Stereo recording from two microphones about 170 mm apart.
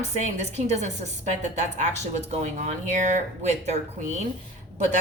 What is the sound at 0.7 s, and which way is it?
Speech, 45° right (ahead or behind).